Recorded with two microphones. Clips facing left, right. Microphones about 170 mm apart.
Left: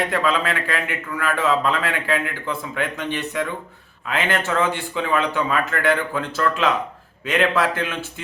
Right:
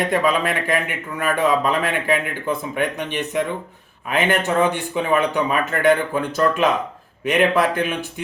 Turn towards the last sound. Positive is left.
turn(degrees=-15)  # may be behind; listen again after turning